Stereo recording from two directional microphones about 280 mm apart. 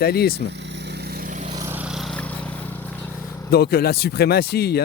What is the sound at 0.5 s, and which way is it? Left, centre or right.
Vehicle, right.